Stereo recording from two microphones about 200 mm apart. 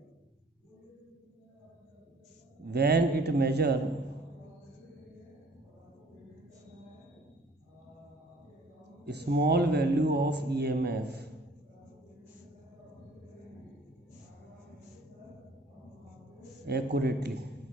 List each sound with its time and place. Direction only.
2.6 s speech: 55° right (ahead or behind)
9.0 s speech: 55° right (ahead or behind)
16.6 s speech: 55° right (ahead or behind)